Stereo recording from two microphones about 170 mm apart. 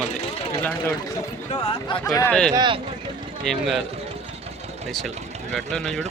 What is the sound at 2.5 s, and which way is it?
Speech, 25° right (ahead or behind).